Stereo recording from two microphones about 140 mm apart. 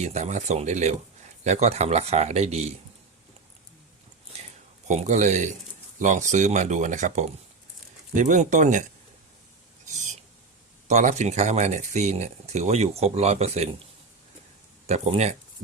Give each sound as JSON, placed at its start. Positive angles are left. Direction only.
{"t": 0.0, "sound": "speech", "side_deg": -55}
{"t": 4.9, "sound": "speech", "side_deg": -55}
{"t": 10.8, "sound": "speech", "side_deg": -55}
{"t": 14.8, "sound": "speech", "side_deg": -50}